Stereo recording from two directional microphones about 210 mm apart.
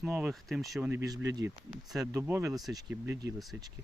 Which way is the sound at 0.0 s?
5° right (ahead or behind).